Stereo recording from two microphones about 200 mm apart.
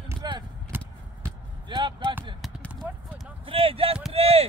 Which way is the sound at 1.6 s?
25° right (ahead or behind).